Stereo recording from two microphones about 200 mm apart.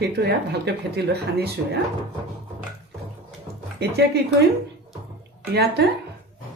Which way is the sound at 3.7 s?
55° right (ahead or behind).